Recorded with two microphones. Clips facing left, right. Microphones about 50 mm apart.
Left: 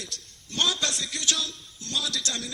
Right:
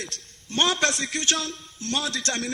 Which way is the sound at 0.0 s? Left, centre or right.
Right.